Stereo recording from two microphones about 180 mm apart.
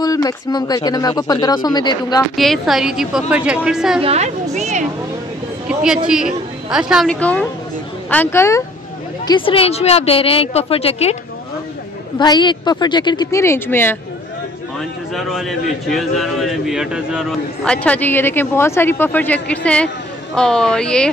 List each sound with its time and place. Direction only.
0.0 s speech: 20° left (ahead or behind)
2.3 s a man's voice: centre (ahead or behind)
4.0 s a woman's voice: 35° right (ahead or behind)
5.7 s a man's voice: 5° right (ahead or behind); by 8.6 s 15° left (ahead or behind)
9.3 s a woman's voice: 30° left (ahead or behind)
12.2 s speech: 25° left (ahead or behind)
15.1 s a man's voice: centre (ahead or behind)
17.8 s a man's voice: 10° left (ahead or behind)